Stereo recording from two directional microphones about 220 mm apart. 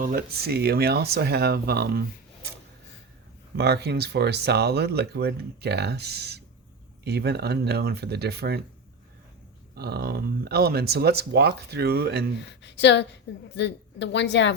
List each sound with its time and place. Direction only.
0.0 s speech: 40° right (ahead or behind)
3.6 s speech: 50° right (ahead or behind)
9.7 s speech: 45° right (ahead or behind)
12.4 s a woman's voice: 50° left (ahead or behind)